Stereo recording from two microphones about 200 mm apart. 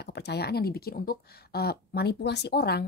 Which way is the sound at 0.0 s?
55° left (ahead or behind).